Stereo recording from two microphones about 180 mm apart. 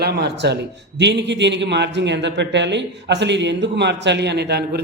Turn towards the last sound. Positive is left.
turn(degrees=-65)  # may be behind; listen again after turning